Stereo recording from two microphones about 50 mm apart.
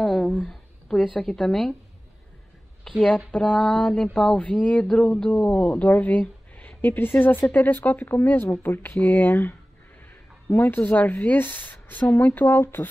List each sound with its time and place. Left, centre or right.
0.2 s a sound: centre
1.2 s a woman's voice: centre
2.9 s a woman's voice: centre; by 8.0 s left
8.0 s speech: left
8.3 s speech: left